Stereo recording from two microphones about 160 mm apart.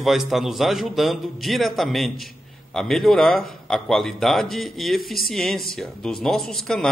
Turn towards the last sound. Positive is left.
turn(degrees=5)  # may be behind; listen again after turning